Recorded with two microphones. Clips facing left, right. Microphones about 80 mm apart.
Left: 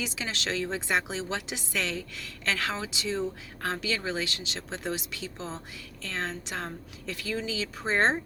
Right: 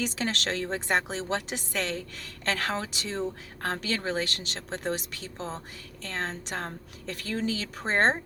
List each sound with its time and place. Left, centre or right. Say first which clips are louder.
0.0 s a woman's voice: right 4 dB; right